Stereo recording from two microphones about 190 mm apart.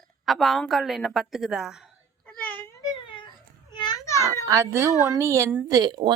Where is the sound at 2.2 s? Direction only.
10° left (ahead or behind).